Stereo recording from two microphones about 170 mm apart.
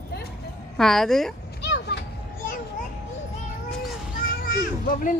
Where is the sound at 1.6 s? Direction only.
85° left.